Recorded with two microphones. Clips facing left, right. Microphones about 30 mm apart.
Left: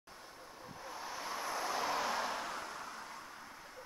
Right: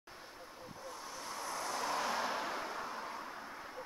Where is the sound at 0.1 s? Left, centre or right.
Centre.